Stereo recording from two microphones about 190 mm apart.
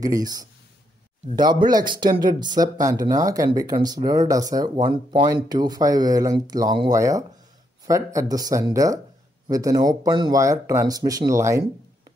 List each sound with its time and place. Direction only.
0.0 s speech: 20° right (ahead or behind)